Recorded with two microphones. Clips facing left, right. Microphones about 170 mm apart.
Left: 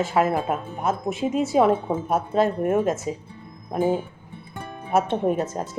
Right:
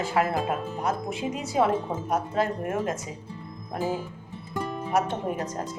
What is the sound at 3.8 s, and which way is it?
Speech, 55° left (ahead or behind).